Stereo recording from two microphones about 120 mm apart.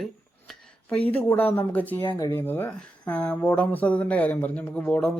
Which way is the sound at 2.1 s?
35° left (ahead or behind).